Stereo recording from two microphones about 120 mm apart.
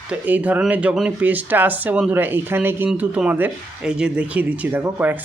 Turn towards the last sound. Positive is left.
turn(degrees=-15)  # may be behind; listen again after turning